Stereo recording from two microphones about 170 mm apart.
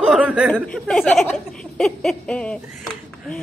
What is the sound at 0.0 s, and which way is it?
A woman's voice, 5° right (ahead or behind).